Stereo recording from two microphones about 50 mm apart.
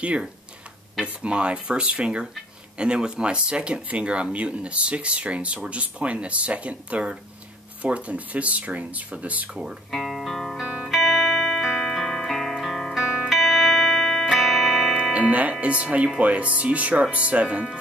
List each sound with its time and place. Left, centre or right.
1.0 s speech: right
9.8 s speech: centre
10.3 s music: centre
10.6 s music: centre
15.1 s music: right
15.6 s speech: right